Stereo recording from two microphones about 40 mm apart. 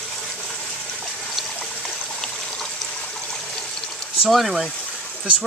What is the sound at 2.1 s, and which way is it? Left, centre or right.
Water, centre.